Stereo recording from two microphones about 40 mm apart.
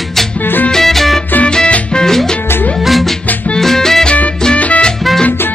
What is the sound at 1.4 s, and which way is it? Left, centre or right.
Music, left.